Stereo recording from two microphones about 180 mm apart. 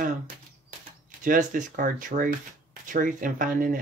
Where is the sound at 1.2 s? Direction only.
45° right (ahead or behind).